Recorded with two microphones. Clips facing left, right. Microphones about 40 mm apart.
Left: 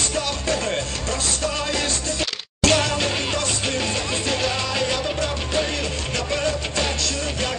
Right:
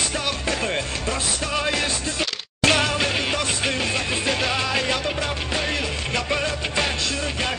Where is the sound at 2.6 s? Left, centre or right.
Centre.